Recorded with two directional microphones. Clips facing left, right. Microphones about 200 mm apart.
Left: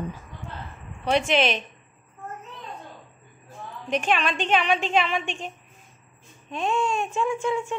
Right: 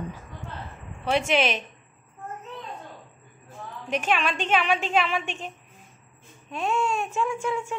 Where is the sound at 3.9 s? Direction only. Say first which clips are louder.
Left 1 dB; 5° right (ahead or behind).